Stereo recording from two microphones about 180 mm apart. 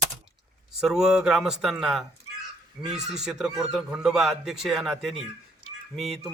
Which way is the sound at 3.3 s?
Centre (ahead or behind).